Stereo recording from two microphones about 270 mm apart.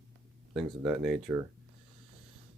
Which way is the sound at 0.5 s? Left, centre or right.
Centre.